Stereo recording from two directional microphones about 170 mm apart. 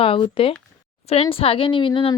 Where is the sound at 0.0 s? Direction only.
35° left (ahead or behind).